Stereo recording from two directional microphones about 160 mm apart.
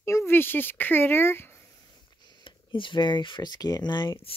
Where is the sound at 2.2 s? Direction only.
30° left (ahead or behind).